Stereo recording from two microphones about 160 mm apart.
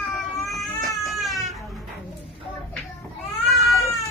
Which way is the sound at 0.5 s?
Centre (ahead or behind).